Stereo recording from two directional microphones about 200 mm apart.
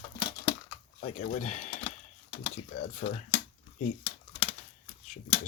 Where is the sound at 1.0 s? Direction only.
35° left (ahead or behind).